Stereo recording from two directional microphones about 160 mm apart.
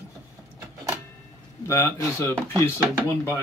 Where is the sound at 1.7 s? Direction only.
15° left (ahead or behind).